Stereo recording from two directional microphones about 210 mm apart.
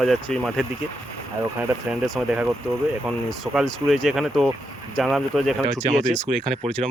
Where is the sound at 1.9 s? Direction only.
Centre (ahead or behind).